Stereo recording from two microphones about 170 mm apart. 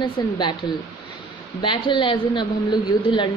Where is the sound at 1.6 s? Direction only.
30° left (ahead or behind).